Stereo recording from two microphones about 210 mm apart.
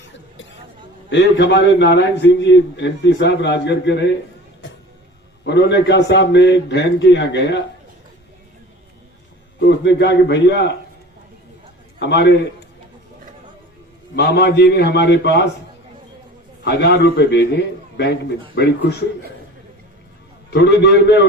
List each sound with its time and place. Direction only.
1.1 s a man's voice: 55° left (ahead or behind)
5.5 s a man's voice: 55° left (ahead or behind)
9.6 s a man's voice: 55° left (ahead or behind)
11.9 s a man's voice: 55° left (ahead or behind)
14.2 s a man's voice: 50° left (ahead or behind)
16.6 s a man's voice: 55° left (ahead or behind)
20.5 s a man's voice: 55° left (ahead or behind)